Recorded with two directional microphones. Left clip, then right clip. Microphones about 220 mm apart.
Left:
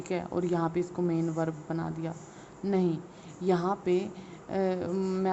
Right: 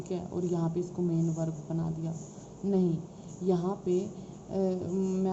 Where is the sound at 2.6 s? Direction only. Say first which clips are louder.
Left 1 dB; 20° left (ahead or behind).